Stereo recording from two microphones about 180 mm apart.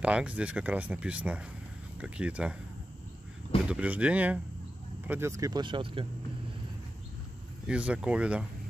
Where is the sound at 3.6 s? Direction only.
5° right (ahead or behind); by 6.0 s 25° right (ahead or behind).